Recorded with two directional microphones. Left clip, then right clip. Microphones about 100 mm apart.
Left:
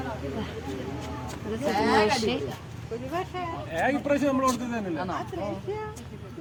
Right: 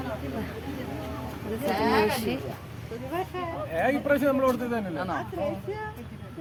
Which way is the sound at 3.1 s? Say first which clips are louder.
Right 1 dB; 15° right (ahead or behind).